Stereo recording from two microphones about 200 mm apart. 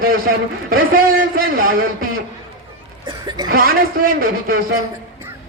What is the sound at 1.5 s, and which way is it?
Speech, 45° right (ahead or behind).